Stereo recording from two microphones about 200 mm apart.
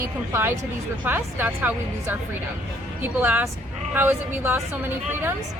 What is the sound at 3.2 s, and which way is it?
Speech, 10° right (ahead or behind).